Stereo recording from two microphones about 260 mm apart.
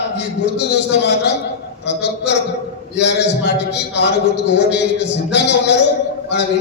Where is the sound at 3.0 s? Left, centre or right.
Left.